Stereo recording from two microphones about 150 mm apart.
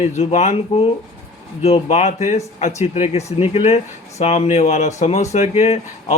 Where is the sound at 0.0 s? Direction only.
45° left (ahead or behind).